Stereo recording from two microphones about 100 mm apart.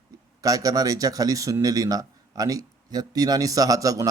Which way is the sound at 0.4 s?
35° right (ahead or behind).